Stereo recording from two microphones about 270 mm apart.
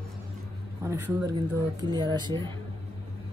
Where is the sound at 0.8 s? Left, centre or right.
Centre.